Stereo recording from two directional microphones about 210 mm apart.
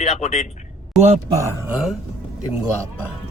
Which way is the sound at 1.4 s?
10° right (ahead or behind).